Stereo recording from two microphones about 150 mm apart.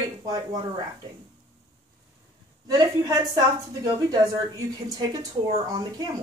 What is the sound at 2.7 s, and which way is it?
A woman's voice, 25° right (ahead or behind).